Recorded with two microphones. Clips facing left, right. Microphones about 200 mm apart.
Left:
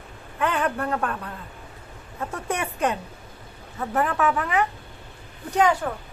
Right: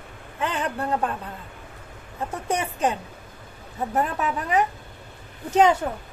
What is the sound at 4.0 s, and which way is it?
Speech, 20° right (ahead or behind).